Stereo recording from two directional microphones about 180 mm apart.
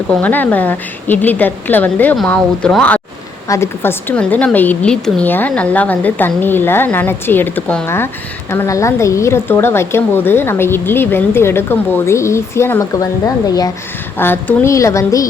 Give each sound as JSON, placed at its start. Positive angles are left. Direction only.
{"t": 0.1, "sound": "a woman's voice", "side_deg": 10}